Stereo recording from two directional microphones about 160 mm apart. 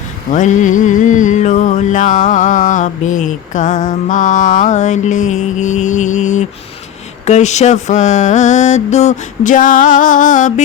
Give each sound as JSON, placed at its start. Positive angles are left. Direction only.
{"t": 0.3, "sound": "music", "side_deg": 50}